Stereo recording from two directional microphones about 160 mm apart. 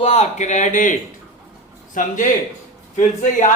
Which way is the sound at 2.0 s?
55° left (ahead or behind).